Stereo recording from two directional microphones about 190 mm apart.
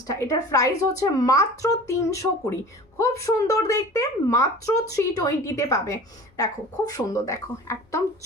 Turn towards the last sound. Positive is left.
turn(degrees=15)  # may be behind; listen again after turning